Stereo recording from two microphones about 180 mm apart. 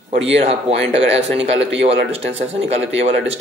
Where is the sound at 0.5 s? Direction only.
35° right (ahead or behind).